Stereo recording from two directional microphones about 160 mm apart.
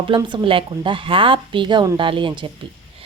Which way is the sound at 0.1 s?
35° right (ahead or behind).